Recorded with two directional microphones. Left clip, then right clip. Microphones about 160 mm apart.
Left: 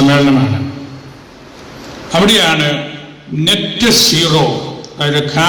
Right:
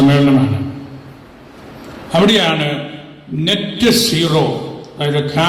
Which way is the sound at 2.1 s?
20° right (ahead or behind).